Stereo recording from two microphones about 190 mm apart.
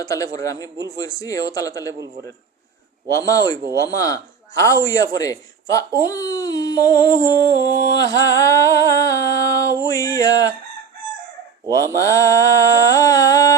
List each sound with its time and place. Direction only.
0.0 s a man's voice: 15° left (ahead or behind)
3.1 s a man's voice: 15° left (ahead or behind)
11.6 s speech: 20° right (ahead or behind)
11.9 s a man's voice: 15° left (ahead or behind)